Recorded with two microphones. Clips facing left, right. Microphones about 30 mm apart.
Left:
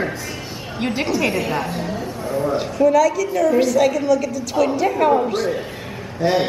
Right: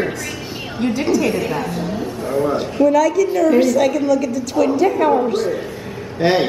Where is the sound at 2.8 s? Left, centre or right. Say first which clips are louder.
Right 1 dB; centre.